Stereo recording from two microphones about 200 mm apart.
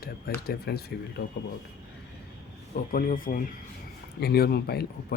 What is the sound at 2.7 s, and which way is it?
Speech, 45° left (ahead or behind).